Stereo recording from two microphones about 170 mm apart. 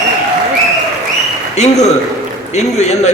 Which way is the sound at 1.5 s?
40° left (ahead or behind).